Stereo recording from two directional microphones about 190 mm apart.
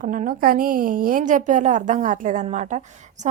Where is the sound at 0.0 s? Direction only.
45° right (ahead or behind).